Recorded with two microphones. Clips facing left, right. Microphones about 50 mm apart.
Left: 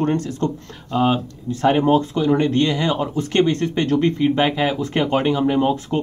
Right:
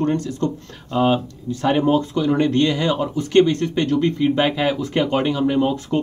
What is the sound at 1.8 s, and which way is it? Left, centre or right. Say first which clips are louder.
Speech: left 1 dB; left.